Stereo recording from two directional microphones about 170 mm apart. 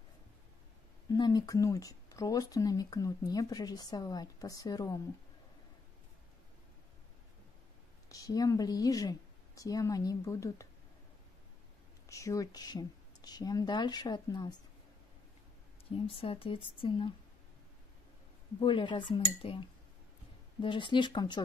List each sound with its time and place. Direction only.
1.0 s speech: 25° left (ahead or behind)
8.1 s a woman's voice: 20° left (ahead or behind)
12.1 s speech: 20° left (ahead or behind)
16.0 s speech: 35° left (ahead or behind)
18.6 s speech: 30° left (ahead or behind)
20.6 s speech: 30° left (ahead or behind)